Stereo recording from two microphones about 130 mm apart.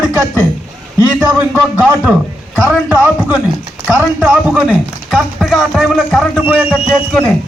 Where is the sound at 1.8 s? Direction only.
5° right (ahead or behind).